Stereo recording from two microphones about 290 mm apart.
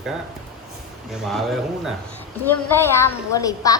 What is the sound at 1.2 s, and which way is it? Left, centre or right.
A woman's voice, centre.